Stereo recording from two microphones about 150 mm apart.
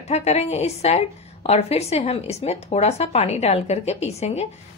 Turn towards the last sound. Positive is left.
turn(degrees=45)  # may be behind; listen again after turning